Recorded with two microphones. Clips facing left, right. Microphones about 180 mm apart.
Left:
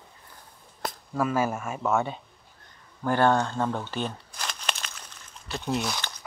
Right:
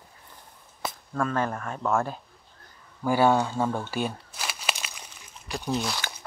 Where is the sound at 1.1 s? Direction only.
5° left (ahead or behind).